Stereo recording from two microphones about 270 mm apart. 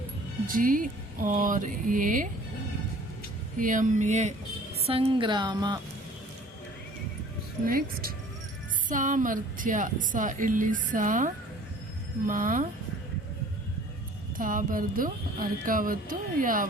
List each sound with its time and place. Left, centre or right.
0.4 s a woman's voice: right
3.6 s a woman's voice: right
7.6 s a woman's voice: right
14.3 s speech: right